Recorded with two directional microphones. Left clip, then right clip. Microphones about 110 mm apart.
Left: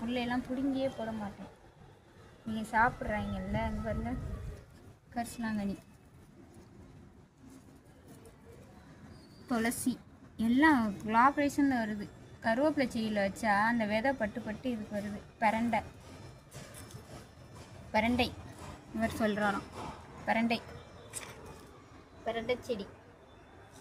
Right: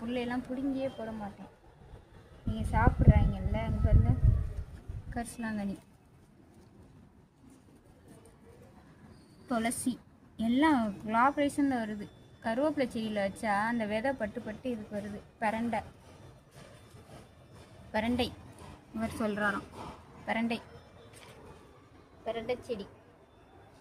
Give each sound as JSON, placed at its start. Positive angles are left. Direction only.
{"t": 0.0, "sound": "a woman's voice", "side_deg": -30}
{"t": 2.6, "sound": "a woman's voice", "side_deg": -20}
{"t": 5.1, "sound": "a woman's voice", "side_deg": -40}
{"t": 9.5, "sound": "a woman's voice", "side_deg": -40}
{"t": 17.9, "sound": "a woman's voice", "side_deg": -25}
{"t": 22.2, "sound": "speech", "side_deg": -15}